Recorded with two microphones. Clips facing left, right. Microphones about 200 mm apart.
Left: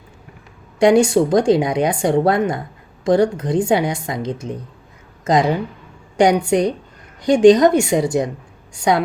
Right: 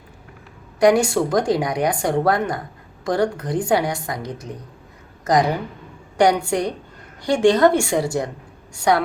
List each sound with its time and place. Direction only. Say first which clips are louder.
0.8 s a woman's voice: left 3 dB; 25° left (ahead or behind)